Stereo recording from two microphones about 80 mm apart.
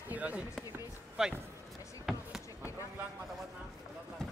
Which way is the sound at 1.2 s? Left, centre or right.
Centre.